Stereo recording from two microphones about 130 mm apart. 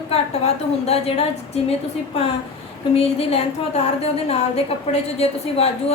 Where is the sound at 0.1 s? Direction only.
50° left (ahead or behind).